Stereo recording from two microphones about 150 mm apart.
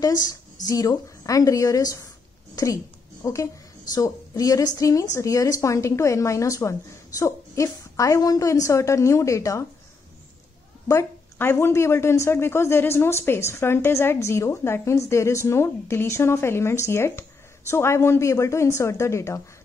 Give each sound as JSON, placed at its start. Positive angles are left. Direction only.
{"t": 0.0, "sound": "a woman's voice", "side_deg": 25}
{"t": 10.9, "sound": "a woman's voice", "side_deg": 15}